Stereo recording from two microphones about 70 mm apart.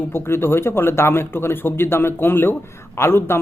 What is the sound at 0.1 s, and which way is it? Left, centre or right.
Speech, left.